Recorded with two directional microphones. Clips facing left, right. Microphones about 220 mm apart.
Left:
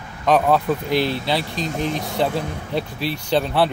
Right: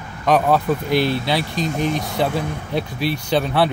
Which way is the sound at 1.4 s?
25° left (ahead or behind).